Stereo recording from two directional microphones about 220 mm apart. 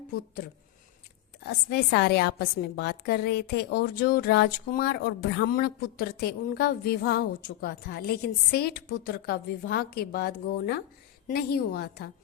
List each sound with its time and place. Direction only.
1.7 s a woman's voice: 50° left (ahead or behind)